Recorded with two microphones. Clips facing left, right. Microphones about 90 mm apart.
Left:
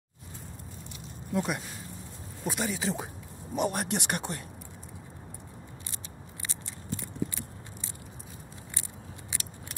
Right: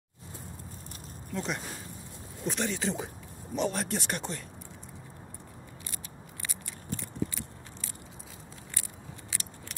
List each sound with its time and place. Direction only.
1.3 s speech: 10° left (ahead or behind)
3.5 s speech: 55° left (ahead or behind)
6.4 s scissors: 25° left (ahead or behind)